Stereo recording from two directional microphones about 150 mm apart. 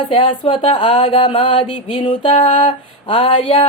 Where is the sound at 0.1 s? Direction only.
35° left (ahead or behind).